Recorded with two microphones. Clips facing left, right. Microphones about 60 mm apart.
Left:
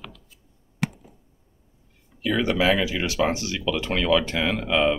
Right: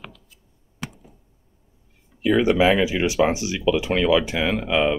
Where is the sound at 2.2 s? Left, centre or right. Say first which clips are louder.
Right 5 dB; centre.